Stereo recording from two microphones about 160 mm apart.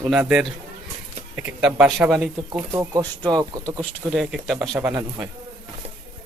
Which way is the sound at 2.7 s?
20° right (ahead or behind).